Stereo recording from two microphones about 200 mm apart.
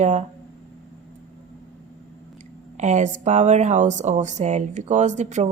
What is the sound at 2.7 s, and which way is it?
Speech, 35° right (ahead or behind).